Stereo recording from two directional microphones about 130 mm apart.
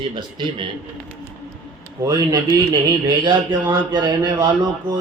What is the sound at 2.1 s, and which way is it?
Speech, 30° right (ahead or behind).